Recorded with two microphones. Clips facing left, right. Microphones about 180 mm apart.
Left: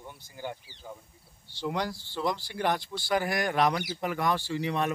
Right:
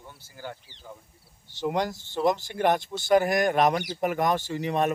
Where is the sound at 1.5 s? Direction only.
50° right (ahead or behind).